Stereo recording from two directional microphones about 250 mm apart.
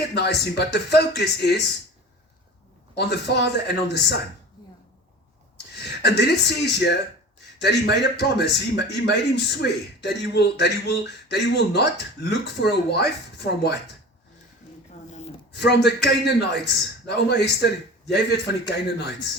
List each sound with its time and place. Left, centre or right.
0.1 s a man's voice: left
2.9 s a man's voice: left
5.7 s a man's voice: left
15.5 s a man's voice: left